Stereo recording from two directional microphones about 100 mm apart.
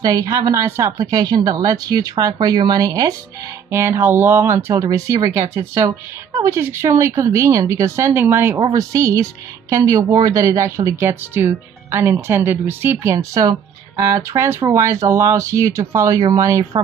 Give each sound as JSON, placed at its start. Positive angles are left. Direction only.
{"t": 0.0, "sound": "speech", "side_deg": -35}
{"t": 0.9, "sound": "speech", "side_deg": -40}
{"t": 3.7, "sound": "speech", "side_deg": -25}
{"t": 8.5, "sound": "a woman's voice", "side_deg": -45}
{"t": 8.9, "sound": "speech", "side_deg": -35}